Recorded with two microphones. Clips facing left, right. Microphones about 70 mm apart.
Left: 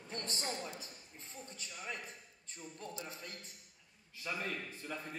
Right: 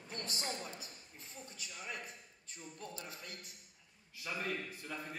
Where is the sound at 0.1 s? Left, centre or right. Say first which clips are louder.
Left 1 dB; left.